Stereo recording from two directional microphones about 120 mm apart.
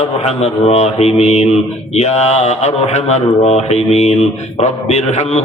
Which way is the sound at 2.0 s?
70° left (ahead or behind).